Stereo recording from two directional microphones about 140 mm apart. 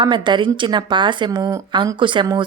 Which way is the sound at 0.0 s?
35° right (ahead or behind).